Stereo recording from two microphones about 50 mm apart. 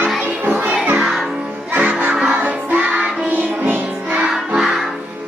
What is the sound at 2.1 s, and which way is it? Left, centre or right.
Music, right.